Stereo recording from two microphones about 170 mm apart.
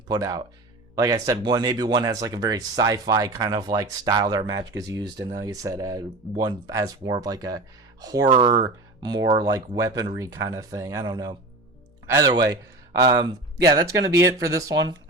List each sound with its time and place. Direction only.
0.1 s speech: 20° right (ahead or behind)